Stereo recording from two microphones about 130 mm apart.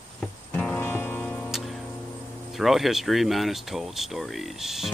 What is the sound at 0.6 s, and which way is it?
Music, 10° left (ahead or behind).